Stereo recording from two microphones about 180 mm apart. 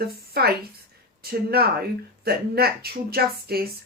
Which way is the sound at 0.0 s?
60° right (ahead or behind).